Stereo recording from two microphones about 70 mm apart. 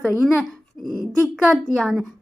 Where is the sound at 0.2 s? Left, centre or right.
Centre.